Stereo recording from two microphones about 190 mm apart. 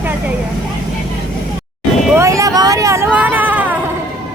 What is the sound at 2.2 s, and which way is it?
Vehicle, 15° right (ahead or behind).